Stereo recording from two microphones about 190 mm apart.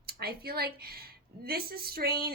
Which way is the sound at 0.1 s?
55° right (ahead or behind).